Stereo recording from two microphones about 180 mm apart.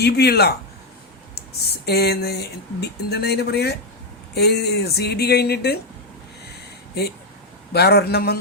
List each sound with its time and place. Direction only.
0.0 s speech: 65° left (ahead or behind)
7.7 s speech: 60° left (ahead or behind)